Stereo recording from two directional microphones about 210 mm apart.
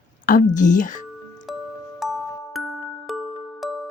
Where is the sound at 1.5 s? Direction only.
Centre (ahead or behind).